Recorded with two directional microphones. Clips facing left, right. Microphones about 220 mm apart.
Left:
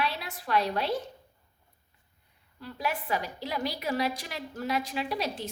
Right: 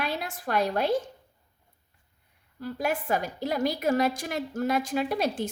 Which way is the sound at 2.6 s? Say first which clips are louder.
Right 4 dB; 45° right (ahead or behind).